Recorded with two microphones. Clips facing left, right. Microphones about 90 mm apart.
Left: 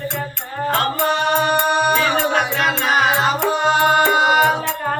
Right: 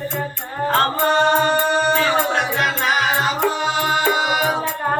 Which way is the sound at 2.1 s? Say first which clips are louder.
Left 1 dB; 65° left (ahead or behind).